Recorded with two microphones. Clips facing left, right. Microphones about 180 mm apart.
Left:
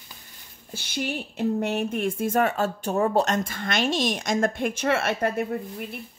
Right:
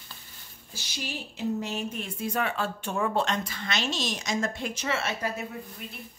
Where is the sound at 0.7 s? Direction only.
55° left (ahead or behind).